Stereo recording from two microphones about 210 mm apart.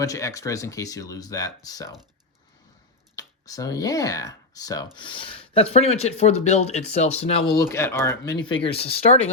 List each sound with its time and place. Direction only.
0.0 s speech: 15° left (ahead or behind)
3.2 s speech: 15° left (ahead or behind)
8.6 s speech: 30° left (ahead or behind)